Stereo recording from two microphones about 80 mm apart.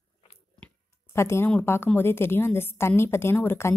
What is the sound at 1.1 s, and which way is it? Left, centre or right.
Speech, left.